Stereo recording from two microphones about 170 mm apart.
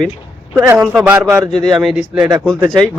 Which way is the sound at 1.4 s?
5° left (ahead or behind).